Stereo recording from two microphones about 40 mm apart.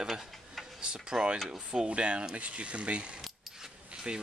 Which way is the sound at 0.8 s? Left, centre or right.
Right.